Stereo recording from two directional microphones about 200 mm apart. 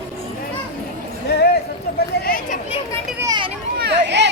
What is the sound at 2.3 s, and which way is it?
Speech, 45° left (ahead or behind).